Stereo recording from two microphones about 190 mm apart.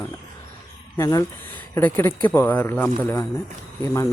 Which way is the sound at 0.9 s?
15° left (ahead or behind).